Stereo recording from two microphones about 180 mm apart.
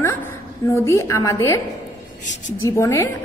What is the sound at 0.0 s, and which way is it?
A woman's voice, 15° left (ahead or behind).